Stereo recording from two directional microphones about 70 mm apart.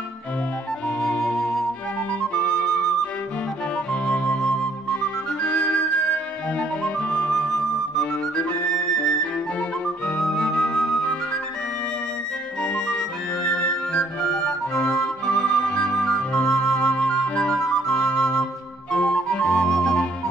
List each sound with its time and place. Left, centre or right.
0.8 s music: centre
3.7 s music: centre
5.4 s flute: centre
6.8 s flute: centre
10.0 s music: centre
12.6 s music: centre